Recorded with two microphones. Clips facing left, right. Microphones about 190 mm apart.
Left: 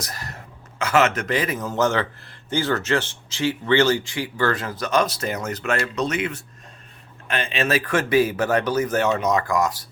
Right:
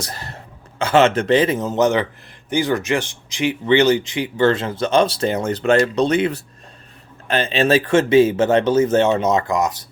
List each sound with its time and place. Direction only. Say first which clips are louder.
0.0 s speech: right 3 dB; 30° right (ahead or behind)